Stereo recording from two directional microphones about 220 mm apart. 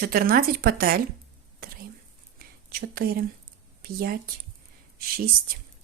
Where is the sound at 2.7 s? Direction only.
45° right (ahead or behind).